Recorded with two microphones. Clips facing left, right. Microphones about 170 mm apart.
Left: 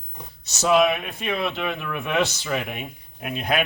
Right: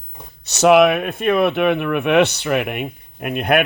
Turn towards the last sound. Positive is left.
turn(degrees=-60)  # may be behind; listen again after turning